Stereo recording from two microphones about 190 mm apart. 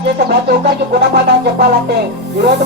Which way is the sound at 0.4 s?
55° right (ahead or behind).